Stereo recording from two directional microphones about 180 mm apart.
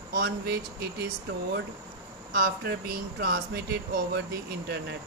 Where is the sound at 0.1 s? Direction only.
60° right (ahead or behind).